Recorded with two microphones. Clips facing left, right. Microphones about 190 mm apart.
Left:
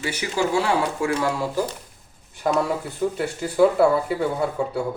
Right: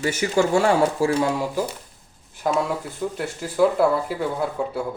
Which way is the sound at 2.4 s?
Centre (ahead or behind).